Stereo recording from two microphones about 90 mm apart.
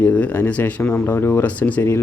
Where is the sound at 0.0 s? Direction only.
15° left (ahead or behind).